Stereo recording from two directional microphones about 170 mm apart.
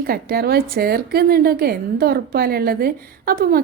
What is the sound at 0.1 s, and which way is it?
A woman's voice, 65° right (ahead or behind).